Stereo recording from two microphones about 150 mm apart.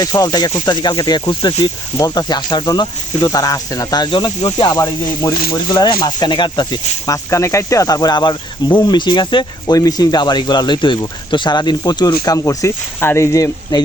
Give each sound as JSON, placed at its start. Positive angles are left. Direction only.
{"t": 0.0, "sound": "speech", "side_deg": 25}